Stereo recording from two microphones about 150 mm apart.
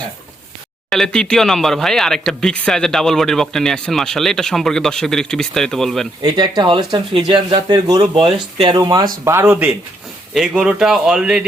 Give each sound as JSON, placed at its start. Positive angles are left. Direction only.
{"t": 0.9, "sound": "speech", "side_deg": 5}
{"t": 6.2, "sound": "speech", "side_deg": -30}
{"t": 9.5, "sound": "speech", "side_deg": -5}